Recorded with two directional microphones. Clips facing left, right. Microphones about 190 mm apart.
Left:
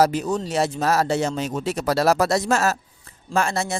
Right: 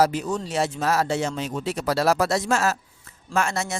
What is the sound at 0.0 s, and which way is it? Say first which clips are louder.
Speech: left 2 dB; 40° left (ahead or behind).